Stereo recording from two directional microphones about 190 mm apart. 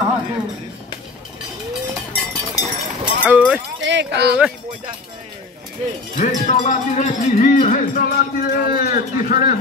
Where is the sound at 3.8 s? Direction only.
70° right (ahead or behind).